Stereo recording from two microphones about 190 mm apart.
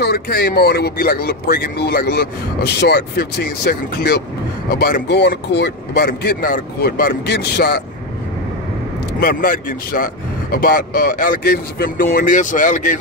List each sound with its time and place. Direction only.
0.0 s speech: 55° left (ahead or behind)
9.2 s speech: 50° left (ahead or behind)